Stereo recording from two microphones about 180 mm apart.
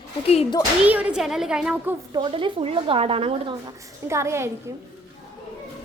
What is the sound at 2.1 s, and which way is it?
Speech, 30° right (ahead or behind).